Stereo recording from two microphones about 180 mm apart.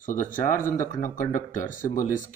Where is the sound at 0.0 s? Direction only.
45° left (ahead or behind).